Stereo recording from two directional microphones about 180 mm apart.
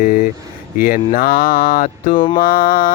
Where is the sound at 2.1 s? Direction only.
25° left (ahead or behind).